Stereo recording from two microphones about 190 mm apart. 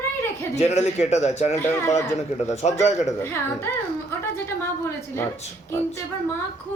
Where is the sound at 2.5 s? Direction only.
35° left (ahead or behind).